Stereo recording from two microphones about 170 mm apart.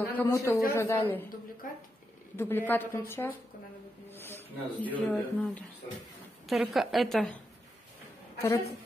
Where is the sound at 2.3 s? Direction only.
10° left (ahead or behind).